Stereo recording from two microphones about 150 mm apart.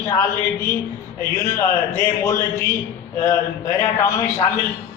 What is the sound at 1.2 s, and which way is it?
A man's voice, 20° left (ahead or behind).